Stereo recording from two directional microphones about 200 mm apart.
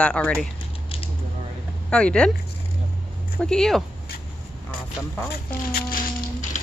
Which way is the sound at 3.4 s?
5° left (ahead or behind).